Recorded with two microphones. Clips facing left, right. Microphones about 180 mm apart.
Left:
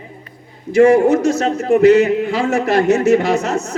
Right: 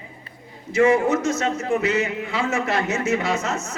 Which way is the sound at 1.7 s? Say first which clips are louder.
Left 14 dB; 65° left (ahead or behind).